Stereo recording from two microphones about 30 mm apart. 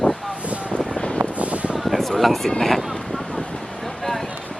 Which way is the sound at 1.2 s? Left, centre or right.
Right.